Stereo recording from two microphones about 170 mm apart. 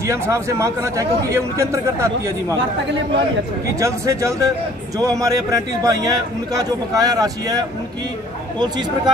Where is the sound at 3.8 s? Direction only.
20° right (ahead or behind).